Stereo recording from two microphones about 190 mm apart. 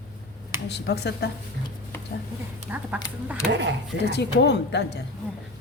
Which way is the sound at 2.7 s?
10° right (ahead or behind).